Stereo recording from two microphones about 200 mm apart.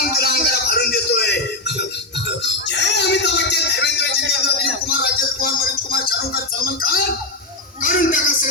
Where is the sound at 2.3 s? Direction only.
60° left (ahead or behind).